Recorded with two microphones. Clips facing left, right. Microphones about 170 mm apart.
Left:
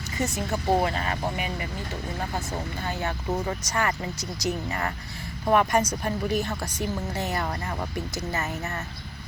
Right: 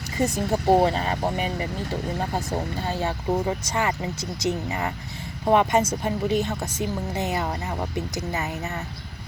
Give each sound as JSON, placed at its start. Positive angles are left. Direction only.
{"t": 0.2, "sound": "speech", "side_deg": -35}